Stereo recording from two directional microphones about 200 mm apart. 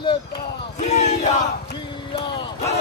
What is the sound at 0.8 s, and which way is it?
Battle cry, 35° left (ahead or behind).